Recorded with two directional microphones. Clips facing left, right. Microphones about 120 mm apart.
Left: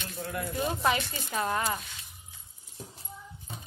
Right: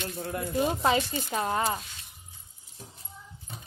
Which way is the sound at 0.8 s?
25° right (ahead or behind).